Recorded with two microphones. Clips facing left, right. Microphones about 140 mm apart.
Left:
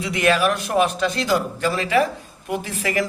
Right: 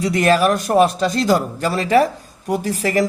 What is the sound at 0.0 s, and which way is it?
A man's voice, 40° right (ahead or behind).